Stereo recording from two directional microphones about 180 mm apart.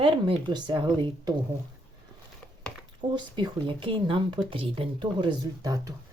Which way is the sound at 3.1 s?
25° right (ahead or behind).